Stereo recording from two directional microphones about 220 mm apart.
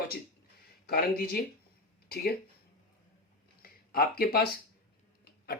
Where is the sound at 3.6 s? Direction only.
45° left (ahead or behind).